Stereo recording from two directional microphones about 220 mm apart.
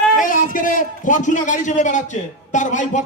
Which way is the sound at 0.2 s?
40° left (ahead or behind).